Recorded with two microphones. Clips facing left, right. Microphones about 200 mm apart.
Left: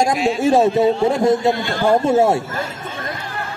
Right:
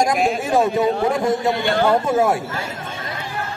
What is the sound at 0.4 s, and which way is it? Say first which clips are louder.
A man's voice: left 4 dB; 25° left (ahead or behind).